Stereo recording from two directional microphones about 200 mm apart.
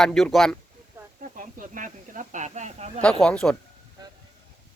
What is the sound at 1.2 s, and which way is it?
Speech, 40° right (ahead or behind).